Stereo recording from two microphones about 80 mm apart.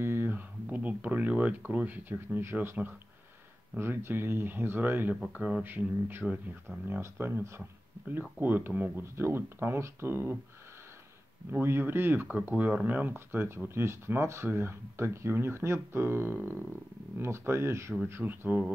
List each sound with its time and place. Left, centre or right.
0.0 s speech: right; by 5.6 s centre
5.6 s speech: right
11.8 s speech: right
12.3 s speech: centre